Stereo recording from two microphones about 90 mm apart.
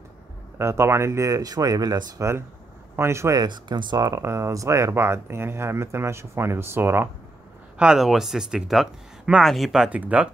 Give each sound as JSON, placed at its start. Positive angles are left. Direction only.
{"t": 0.6, "sound": "speech", "side_deg": -30}
{"t": 3.0, "sound": "speech", "side_deg": -30}
{"t": 3.3, "sound": "speech", "side_deg": -55}
{"t": 4.1, "sound": "speech", "side_deg": -30}
{"t": 7.7, "sound": "speech", "side_deg": -10}
{"t": 9.8, "sound": "speech", "side_deg": -15}